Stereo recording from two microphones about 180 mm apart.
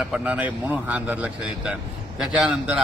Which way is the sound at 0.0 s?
5° right (ahead or behind).